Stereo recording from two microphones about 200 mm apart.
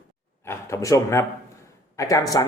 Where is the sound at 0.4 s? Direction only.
15° left (ahead or behind).